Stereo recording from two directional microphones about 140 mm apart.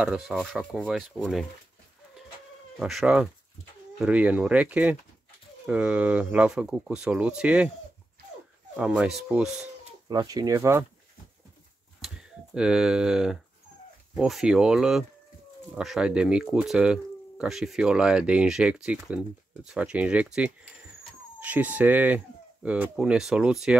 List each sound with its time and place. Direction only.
0.0 s speech: 5° right (ahead or behind)
1.1 s speech: 5° left (ahead or behind)
2.8 s speech: centre (ahead or behind)
8.7 s speech: 5° right (ahead or behind)
10.0 s speech: 30° right (ahead or behind)
12.5 s speech: 5° right (ahead or behind)